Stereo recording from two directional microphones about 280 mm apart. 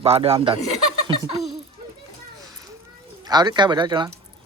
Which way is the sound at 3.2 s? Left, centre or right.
Centre.